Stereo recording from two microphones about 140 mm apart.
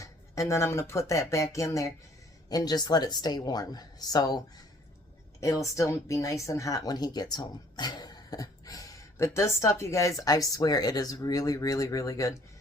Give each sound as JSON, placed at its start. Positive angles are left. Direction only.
{"t": 0.0, "sound": "speech", "side_deg": 20}
{"t": 5.4, "sound": "speech", "side_deg": 20}